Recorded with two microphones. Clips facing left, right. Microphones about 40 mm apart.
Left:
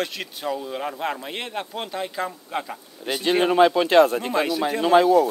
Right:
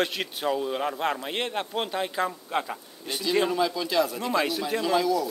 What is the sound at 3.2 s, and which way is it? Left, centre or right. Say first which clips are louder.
Speech: left 7 dB; left.